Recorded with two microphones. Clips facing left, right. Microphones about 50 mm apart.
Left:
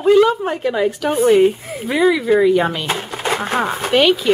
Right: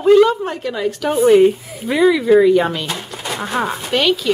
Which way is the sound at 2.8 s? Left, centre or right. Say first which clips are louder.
Left 4 dB; left.